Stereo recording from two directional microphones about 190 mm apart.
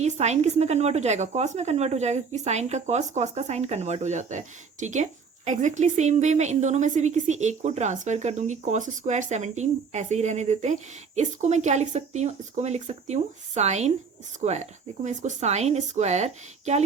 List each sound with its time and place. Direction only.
0.0 s a woman's voice: 35° right (ahead or behind)